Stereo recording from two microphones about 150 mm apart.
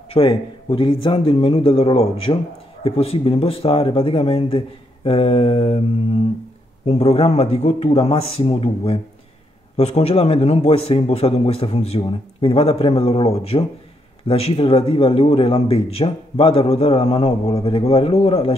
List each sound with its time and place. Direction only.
0.1 s a man's voice: 40° left (ahead or behind)